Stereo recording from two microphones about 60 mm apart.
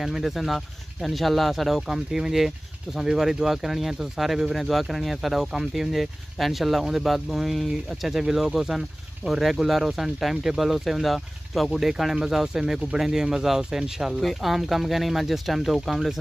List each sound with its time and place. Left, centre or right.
0.0 s speech: centre